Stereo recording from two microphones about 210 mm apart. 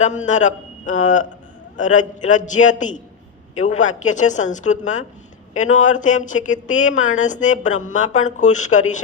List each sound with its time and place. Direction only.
0.0 s speech: 35° left (ahead or behind)